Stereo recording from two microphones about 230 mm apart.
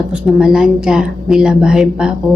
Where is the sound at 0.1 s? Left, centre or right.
Centre.